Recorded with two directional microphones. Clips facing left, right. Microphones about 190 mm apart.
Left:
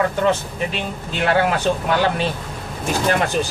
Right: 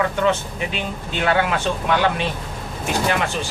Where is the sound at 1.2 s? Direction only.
40° left (ahead or behind).